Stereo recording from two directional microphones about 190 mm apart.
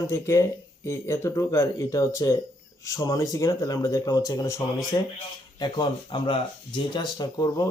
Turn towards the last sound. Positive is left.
turn(degrees=20)  # may be behind; listen again after turning